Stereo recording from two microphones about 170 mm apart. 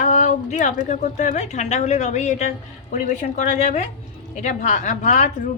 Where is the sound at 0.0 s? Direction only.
45° left (ahead or behind).